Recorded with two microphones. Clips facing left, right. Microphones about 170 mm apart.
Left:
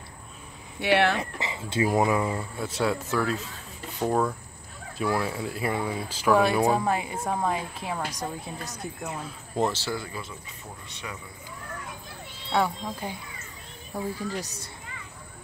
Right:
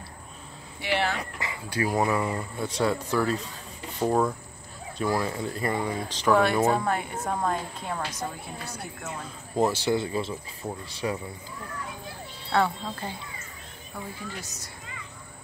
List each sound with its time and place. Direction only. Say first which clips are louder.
0.7 s speech: left 5 dB; 65° left (ahead or behind)
1.1 s speech: left 3 dB; 20° left (ahead or behind)
2.2 s speech: even; 5° left (ahead or behind)
9.6 s speech: right 4 dB; 10° right (ahead or behind); by 11.1 s 35° right (ahead or behind)
12.5 s speech: right 1 dB; 10° left (ahead or behind)
14.1 s a woman's voice: left 6 dB; 35° left (ahead or behind)